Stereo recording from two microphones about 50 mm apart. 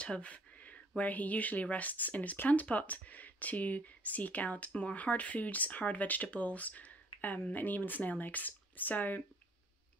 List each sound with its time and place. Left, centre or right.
0.0 s speech: left